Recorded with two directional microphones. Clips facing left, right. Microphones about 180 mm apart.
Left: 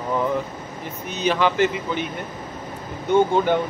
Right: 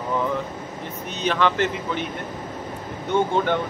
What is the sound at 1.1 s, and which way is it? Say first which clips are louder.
Speech: left 2 dB; 5° left (ahead or behind).